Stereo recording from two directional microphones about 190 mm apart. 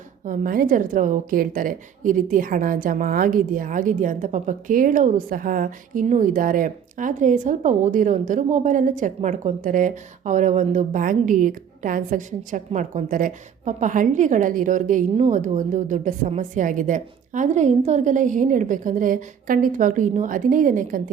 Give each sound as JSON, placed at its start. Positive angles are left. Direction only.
{"t": 0.3, "sound": "a woman's voice", "side_deg": -50}